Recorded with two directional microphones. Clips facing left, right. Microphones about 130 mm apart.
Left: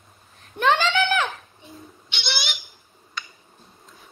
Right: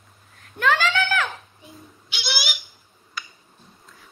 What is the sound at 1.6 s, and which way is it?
Bird, centre (ahead or behind).